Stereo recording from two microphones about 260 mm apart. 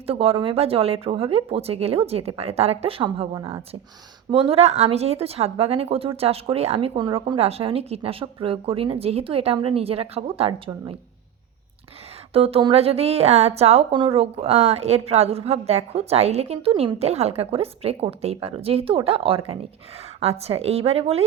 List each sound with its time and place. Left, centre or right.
0.1 s a woman's voice: right
12.3 s a woman's voice: right